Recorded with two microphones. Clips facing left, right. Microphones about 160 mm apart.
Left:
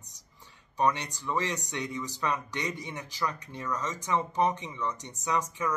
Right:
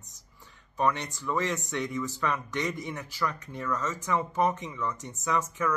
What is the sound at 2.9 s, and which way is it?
Speech, 15° left (ahead or behind).